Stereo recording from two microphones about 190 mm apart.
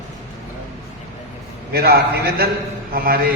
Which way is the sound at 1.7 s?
55° right (ahead or behind).